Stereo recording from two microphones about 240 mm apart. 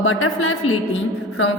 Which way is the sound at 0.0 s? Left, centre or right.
Left.